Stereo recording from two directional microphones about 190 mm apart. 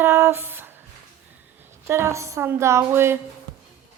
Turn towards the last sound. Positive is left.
turn(degrees=-10)  # may be behind; listen again after turning